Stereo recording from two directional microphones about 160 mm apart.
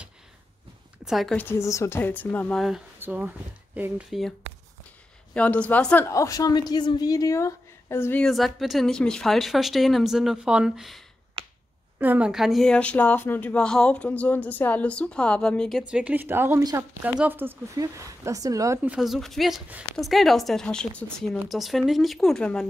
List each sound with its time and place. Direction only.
1.0 s a woman's voice: centre (ahead or behind)
1.4 s speech: 15° left (ahead or behind)
3.0 s speech: 10° right (ahead or behind)
5.3 s a woman's voice: 10° left (ahead or behind)
15.9 s a woman's voice: 10° right (ahead or behind)
18.8 s a woman's voice: 5° right (ahead or behind)